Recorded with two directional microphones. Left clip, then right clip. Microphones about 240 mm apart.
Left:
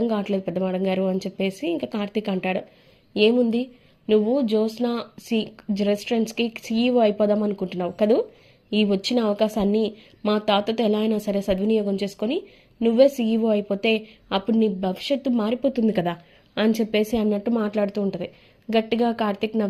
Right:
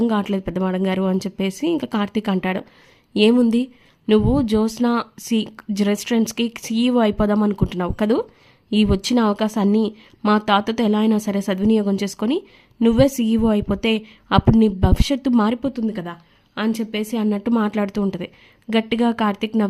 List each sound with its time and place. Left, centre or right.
0.0 s a woman's voice: right
15.9 s a woman's voice: centre
17.2 s a woman's voice: right
18.9 s a woman's voice: right